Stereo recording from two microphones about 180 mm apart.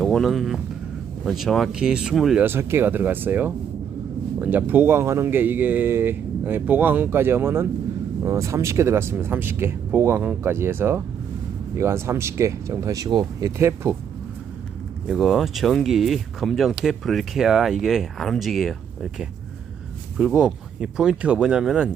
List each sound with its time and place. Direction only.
0.0 s speech: centre (ahead or behind); by 13.9 s 15° right (ahead or behind)
15.0 s speech: centre (ahead or behind)
20.1 s speech: 5° right (ahead or behind)